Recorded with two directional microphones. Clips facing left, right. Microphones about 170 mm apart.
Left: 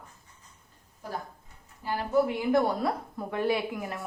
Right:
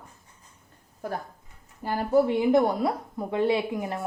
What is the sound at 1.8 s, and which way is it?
Speech, 50° right (ahead or behind).